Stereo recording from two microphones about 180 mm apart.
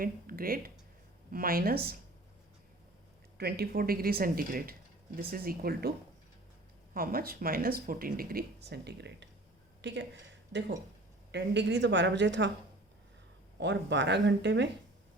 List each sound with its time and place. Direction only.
0.0 s speech: 55° right (ahead or behind)
3.3 s speech: 60° right (ahead or behind)
6.9 s speech: 55° right (ahead or behind); by 10.1 s 75° right (ahead or behind)
11.3 s a woman's voice: 70° right (ahead or behind)
13.6 s speech: 80° right